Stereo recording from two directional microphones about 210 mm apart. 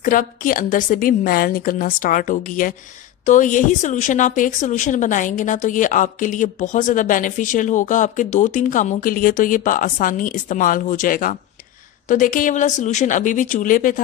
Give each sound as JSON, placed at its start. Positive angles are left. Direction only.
{"t": 0.0, "sound": "a woman's voice", "side_deg": 40}